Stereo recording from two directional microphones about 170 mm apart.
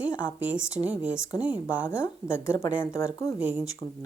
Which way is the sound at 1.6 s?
15° left (ahead or behind).